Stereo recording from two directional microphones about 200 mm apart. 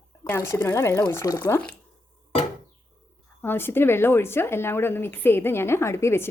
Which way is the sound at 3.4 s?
10° left (ahead or behind).